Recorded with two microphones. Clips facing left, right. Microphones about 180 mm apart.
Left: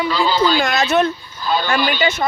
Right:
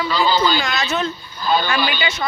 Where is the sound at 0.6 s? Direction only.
50° left (ahead or behind).